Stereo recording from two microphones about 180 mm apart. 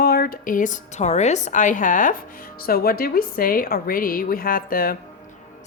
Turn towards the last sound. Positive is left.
turn(degrees=55)  # may be behind; listen again after turning